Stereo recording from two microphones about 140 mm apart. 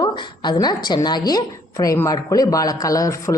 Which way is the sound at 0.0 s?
30° left (ahead or behind).